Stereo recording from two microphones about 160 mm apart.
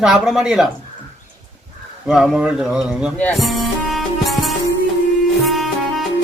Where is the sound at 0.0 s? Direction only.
Centre (ahead or behind).